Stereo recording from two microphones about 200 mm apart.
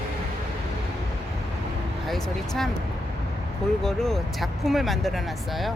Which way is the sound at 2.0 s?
Centre (ahead or behind).